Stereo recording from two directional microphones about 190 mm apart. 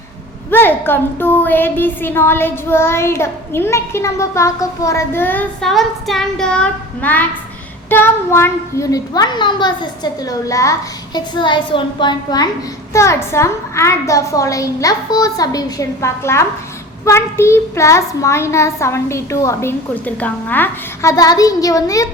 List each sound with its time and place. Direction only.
0.5 s a woman's voice: 10° left (ahead or behind)